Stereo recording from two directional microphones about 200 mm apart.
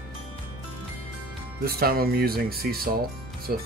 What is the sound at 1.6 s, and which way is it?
Speech, 50° right (ahead or behind).